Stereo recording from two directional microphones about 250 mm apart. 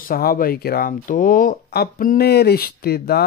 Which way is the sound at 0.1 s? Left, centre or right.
Left.